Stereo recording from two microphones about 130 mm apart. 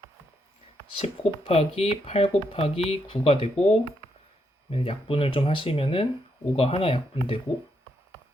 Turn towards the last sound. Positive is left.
turn(degrees=45)  # may be behind; listen again after turning